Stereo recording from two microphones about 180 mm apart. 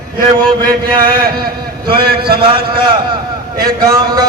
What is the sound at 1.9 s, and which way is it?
Speech, 60° right (ahead or behind).